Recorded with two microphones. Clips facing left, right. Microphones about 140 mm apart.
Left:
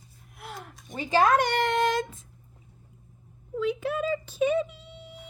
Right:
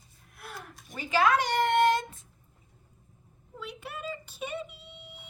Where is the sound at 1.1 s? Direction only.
40° left (ahead or behind); by 2.0 s 90° left.